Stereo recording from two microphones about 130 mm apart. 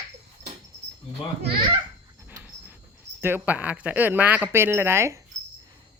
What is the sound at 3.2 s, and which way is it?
A woman's voice, 15° right (ahead or behind).